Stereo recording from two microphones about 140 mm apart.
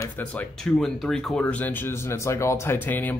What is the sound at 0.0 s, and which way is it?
Speech, 10° left (ahead or behind).